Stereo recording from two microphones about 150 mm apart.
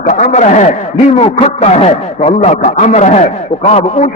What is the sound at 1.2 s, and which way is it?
A man's voice, 45° left (ahead or behind).